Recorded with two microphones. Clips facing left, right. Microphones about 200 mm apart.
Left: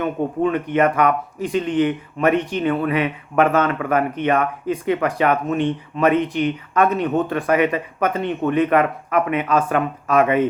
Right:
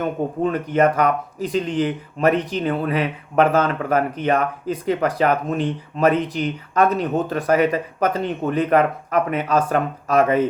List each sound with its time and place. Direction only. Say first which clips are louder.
0.0 s speech: left 1 dB; 40° right (ahead or behind)